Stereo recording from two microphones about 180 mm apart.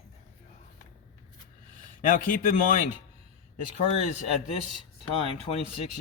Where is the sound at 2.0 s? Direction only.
45° left (ahead or behind).